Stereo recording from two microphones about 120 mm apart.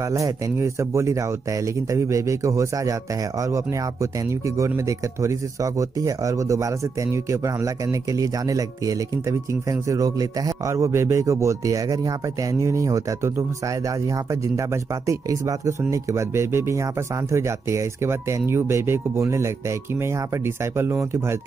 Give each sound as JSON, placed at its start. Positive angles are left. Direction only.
{"t": 0.1, "sound": "speech", "side_deg": -25}